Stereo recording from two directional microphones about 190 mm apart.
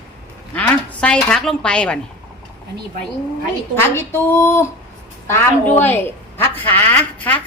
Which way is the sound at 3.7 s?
10° left (ahead or behind).